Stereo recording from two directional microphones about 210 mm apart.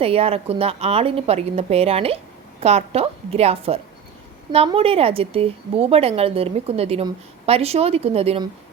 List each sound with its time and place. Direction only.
0.0 s a woman's voice: 25° right (ahead or behind)